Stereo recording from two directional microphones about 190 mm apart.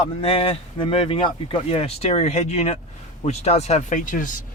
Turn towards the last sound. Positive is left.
turn(degrees=45)  # may be behind; listen again after turning